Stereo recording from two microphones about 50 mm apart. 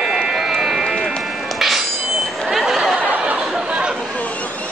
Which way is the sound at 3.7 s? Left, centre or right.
Right.